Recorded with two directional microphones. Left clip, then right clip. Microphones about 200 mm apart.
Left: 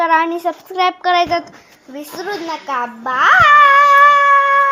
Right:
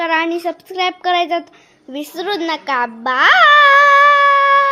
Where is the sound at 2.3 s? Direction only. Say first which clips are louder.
Right 3 dB; 30° right (ahead or behind).